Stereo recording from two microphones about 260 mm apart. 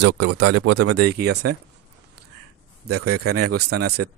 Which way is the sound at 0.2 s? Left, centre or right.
Right.